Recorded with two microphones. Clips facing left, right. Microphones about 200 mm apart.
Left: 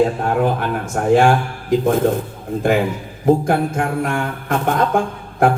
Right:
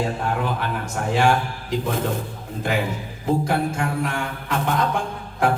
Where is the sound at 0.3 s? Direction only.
50° left (ahead or behind).